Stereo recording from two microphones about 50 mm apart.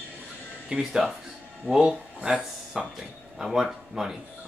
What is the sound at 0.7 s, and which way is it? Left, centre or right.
Speech, centre.